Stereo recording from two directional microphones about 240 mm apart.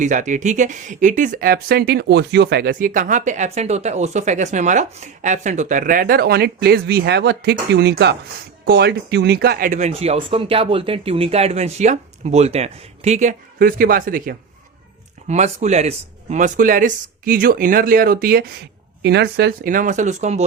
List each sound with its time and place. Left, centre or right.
0.0 s speech: right